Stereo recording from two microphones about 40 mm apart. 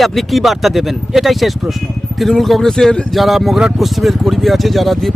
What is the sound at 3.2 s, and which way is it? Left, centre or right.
Speech, centre.